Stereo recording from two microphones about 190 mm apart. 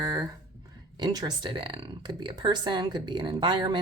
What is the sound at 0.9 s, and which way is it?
Speech, 20° right (ahead or behind).